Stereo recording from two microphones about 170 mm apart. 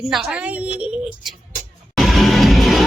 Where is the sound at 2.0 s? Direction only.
Centre (ahead or behind).